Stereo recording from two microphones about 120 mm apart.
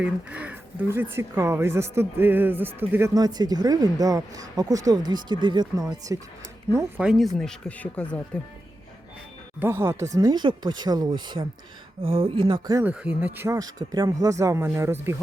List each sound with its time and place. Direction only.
0.0 s speech: 10° right (ahead or behind)
3.2 s speech: 35° right (ahead or behind)
7.0 s speech: 5° right (ahead or behind)
7.3 s speech: 10° left (ahead or behind)
9.6 s speech: 20° right (ahead or behind); by 11.4 s 40° right (ahead or behind)
12.0 s speech: 50° right (ahead or behind)
12.8 s speech: 10° right (ahead or behind)
13.6 s speech: 35° right (ahead or behind)